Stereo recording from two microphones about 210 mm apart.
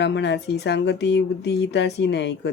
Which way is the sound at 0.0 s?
55° left (ahead or behind).